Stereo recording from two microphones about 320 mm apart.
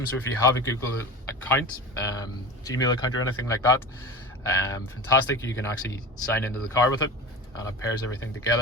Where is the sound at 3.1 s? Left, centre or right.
Left.